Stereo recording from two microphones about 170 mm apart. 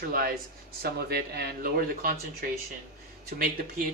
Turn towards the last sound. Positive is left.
turn(degrees=-60)  # may be behind; listen again after turning